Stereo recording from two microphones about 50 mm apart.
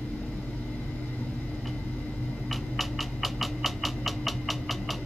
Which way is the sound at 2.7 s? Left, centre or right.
Centre.